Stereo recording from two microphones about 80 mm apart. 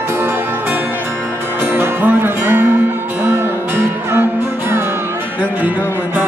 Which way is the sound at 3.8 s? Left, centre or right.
Right.